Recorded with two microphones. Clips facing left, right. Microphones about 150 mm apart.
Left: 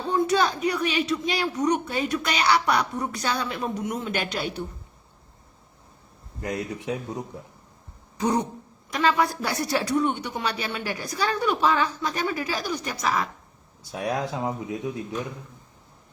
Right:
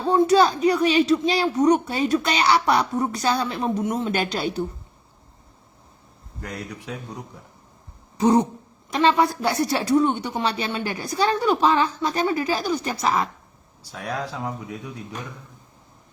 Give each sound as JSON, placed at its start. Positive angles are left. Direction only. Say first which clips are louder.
{"t": 0.1, "sound": "speech", "louder": "right 6 dB", "side_deg": -30}
{"t": 6.4, "sound": "speech", "louder": "left 4 dB", "side_deg": 20}
{"t": 8.2, "sound": "speech", "louder": "right 6 dB", "side_deg": -25}
{"t": 13.9, "sound": "speech", "louder": "left 2 dB", "side_deg": 20}